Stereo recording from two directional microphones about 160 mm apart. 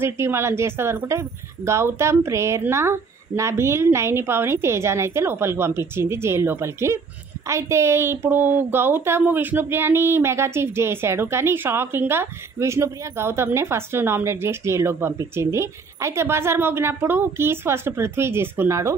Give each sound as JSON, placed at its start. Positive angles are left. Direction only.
{"t": 0.0, "sound": "a woman's voice", "side_deg": -15}